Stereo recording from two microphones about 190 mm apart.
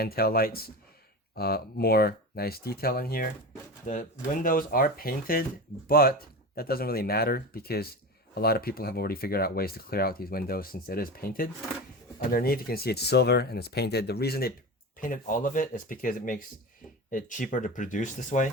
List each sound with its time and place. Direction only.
0.0 s speech: 50° left (ahead or behind)
3.9 s speech: 40° left (ahead or behind)